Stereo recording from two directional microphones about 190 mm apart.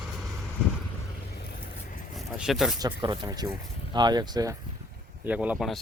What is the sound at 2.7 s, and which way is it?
Speech, 20° right (ahead or behind).